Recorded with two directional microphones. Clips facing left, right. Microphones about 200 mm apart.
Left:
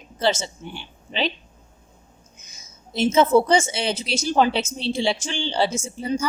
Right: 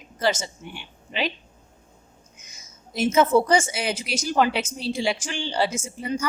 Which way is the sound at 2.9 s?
25° left (ahead or behind).